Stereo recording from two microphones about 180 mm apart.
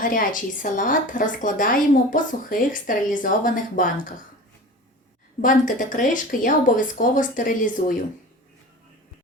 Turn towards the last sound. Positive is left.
turn(degrees=50)  # may be behind; listen again after turning